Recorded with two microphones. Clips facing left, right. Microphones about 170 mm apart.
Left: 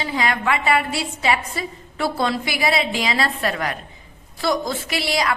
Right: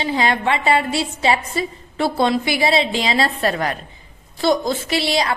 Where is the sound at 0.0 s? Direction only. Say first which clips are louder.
Right 3 dB; 30° right (ahead or behind).